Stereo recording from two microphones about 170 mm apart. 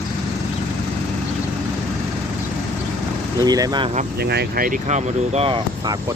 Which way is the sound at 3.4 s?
25° right (ahead or behind).